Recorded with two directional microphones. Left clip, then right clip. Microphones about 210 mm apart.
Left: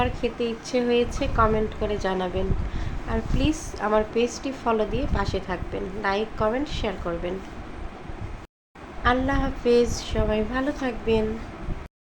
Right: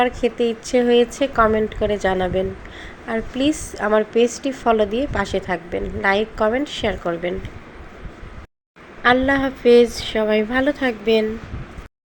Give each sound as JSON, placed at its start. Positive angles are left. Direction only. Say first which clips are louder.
{"t": 0.0, "sound": "a woman's voice", "louder": "right 7 dB", "side_deg": -25}
{"t": 9.0, "sound": "a woman's voice", "louder": "right 7 dB", "side_deg": -20}